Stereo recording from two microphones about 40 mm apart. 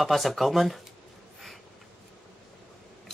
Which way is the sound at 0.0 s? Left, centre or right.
Centre.